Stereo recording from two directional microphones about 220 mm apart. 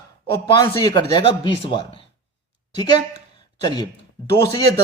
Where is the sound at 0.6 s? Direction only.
15° left (ahead or behind).